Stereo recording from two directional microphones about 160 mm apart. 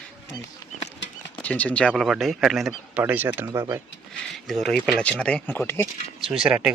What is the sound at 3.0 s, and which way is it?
Speech, 15° right (ahead or behind).